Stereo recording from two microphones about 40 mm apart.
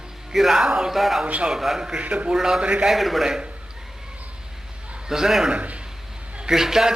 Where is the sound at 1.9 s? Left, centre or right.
Right.